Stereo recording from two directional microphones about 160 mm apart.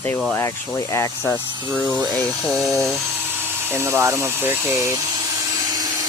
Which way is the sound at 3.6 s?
15° right (ahead or behind).